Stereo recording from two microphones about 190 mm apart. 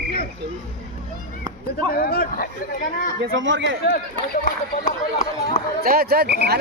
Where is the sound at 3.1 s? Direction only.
75° right (ahead or behind).